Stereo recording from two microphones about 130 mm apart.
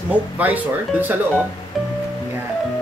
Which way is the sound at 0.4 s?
10° right (ahead or behind).